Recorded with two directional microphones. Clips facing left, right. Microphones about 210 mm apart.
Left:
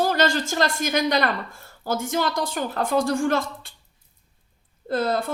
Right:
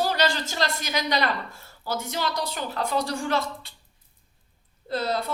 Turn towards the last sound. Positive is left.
turn(degrees=50)  # may be behind; listen again after turning